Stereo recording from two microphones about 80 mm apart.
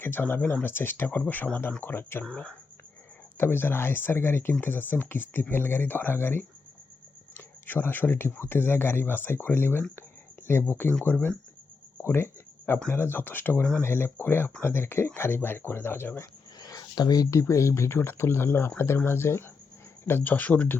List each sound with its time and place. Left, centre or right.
0.0 s speech: left
2.2 s speech: centre
3.3 s speech: left
7.3 s a sound: left
8.4 s speech: left
16.6 s a sound: left
17.5 s speech: left; by 20.7 s centre